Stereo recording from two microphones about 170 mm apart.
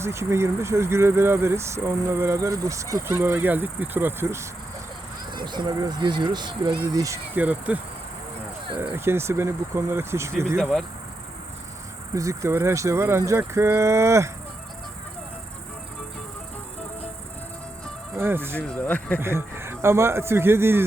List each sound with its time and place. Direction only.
0.0 s speech: 15° right (ahead or behind)
5.5 s speech: 25° right (ahead or behind); by 7.8 s 10° right (ahead or behind)
8.8 s speech: 15° right (ahead or behind)
10.6 s speech: centre (ahead or behind)
12.1 s speech: 20° right (ahead or behind)
18.2 s speech: 15° right (ahead or behind)
18.5 s speech: 5° left (ahead or behind)
19.2 s speech: 15° right (ahead or behind)